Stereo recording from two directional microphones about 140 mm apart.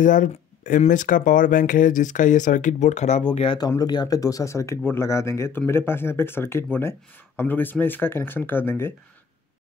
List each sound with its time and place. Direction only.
0.0 s speech: 70° left (ahead or behind)
3.3 s speech: 35° left (ahead or behind); by 8.9 s 15° left (ahead or behind)